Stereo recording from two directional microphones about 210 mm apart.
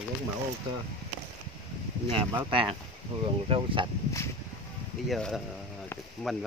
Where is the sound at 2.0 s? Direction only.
25° right (ahead or behind).